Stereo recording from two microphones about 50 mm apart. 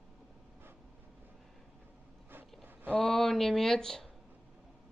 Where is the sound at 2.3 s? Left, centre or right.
Right.